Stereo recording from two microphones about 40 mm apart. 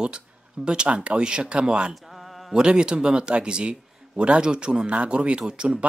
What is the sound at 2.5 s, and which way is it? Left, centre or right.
A man's voice, right.